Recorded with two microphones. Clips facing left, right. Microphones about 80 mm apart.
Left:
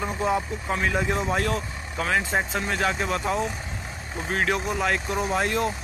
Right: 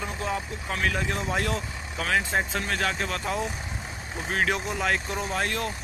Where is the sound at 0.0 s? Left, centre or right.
Centre.